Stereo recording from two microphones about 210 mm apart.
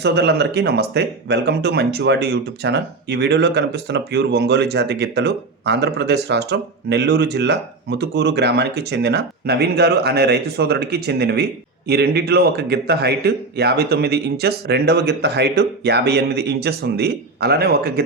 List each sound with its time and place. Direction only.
0.0 s speech: 50° right (ahead or behind)